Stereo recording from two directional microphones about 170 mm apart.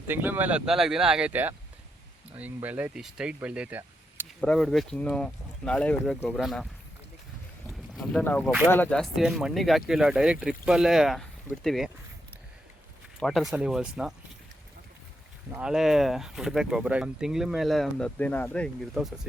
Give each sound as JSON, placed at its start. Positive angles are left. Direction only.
{"t": 0.1, "sound": "speech", "side_deg": -10}
{"t": 4.4, "sound": "speech", "side_deg": 5}
{"t": 8.2, "sound": "speech", "side_deg": 10}
{"t": 13.1, "sound": "speech", "side_deg": 0}
{"t": 15.5, "sound": "speech", "side_deg": -5}